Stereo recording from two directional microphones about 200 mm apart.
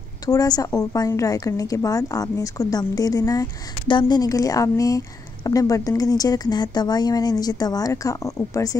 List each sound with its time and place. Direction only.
0.3 s a woman's voice: 20° left (ahead or behind)